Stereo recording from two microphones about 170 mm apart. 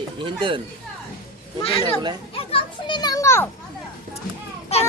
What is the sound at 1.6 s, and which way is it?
Speech, 35° left (ahead or behind).